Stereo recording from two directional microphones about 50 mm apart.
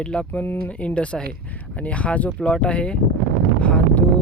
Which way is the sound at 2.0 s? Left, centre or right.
Left.